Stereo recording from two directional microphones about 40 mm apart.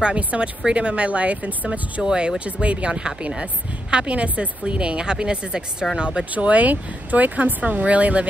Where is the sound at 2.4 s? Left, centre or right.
Right.